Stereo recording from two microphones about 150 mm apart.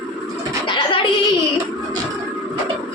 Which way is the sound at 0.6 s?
30° left (ahead or behind).